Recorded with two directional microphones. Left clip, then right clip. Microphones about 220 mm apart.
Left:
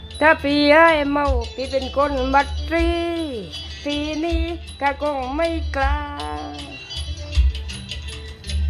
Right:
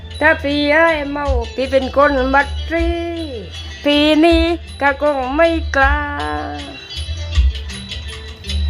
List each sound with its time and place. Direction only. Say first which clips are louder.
0.2 s speech: right 2 dB; 10° left (ahead or behind)
1.5 s music: right 11 dB; 10° right (ahead or behind)
2.3 s speech: right 3 dB; 5° left (ahead or behind)
3.8 s music: right 13 dB; 15° right (ahead or behind)
6.9 s music: right 3 dB; 45° left (ahead or behind)